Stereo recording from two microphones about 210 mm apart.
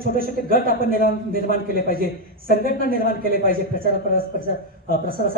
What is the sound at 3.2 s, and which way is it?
A man's voice, 45° right (ahead or behind).